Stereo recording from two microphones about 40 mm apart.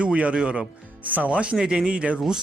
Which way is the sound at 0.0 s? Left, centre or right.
Right.